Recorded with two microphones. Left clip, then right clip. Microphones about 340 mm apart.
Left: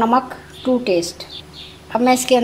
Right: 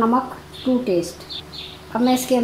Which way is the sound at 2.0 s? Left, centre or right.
Left.